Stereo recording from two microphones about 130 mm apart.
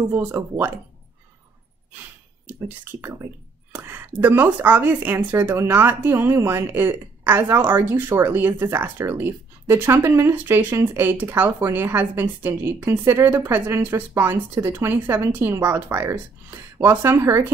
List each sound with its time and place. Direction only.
0.1 s speech: 15° right (ahead or behind)
2.8 s a woman's voice: 20° right (ahead or behind)